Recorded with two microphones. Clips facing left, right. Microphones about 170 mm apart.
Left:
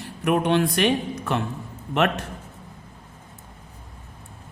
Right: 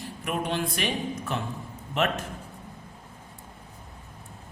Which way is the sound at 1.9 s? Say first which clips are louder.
Left 5 dB; 70° left (ahead or behind).